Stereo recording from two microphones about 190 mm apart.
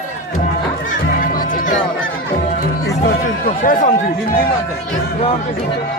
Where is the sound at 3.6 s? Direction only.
45° left (ahead or behind).